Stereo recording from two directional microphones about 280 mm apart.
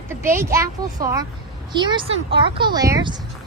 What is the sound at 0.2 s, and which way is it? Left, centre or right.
Speech, centre.